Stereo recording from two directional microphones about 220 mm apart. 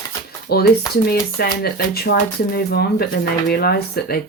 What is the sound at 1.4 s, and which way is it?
Speech, 45° left (ahead or behind).